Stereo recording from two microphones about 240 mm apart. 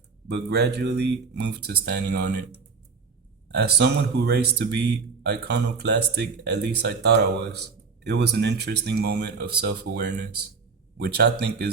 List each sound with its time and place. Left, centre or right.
0.3 s speech: right
3.5 s speech: right